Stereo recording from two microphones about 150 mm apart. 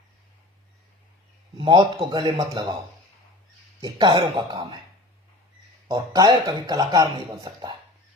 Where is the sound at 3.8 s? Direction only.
30° right (ahead or behind).